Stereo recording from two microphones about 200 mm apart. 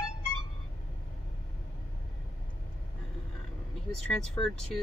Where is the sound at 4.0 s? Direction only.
Centre (ahead or behind).